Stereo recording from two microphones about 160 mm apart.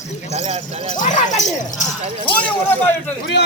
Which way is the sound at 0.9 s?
50° left (ahead or behind).